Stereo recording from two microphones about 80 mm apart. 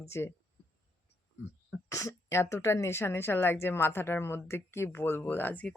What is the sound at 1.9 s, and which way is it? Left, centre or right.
Speech, left.